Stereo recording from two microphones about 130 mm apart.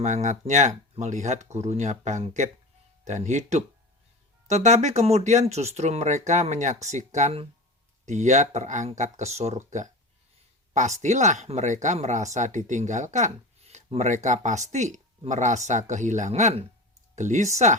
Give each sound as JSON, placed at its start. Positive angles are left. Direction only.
{"t": 0.0, "sound": "speech", "side_deg": -70}